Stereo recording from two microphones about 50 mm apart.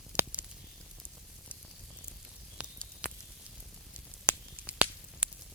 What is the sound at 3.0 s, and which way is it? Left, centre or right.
Sizzle, right.